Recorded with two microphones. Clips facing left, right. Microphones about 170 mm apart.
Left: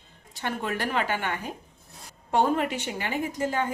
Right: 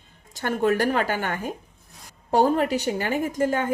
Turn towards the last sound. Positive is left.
turn(degrees=-50)  # may be behind; listen again after turning